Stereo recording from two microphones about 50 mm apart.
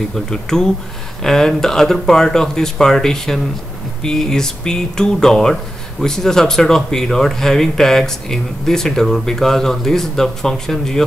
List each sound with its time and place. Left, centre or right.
0.1 s speech: centre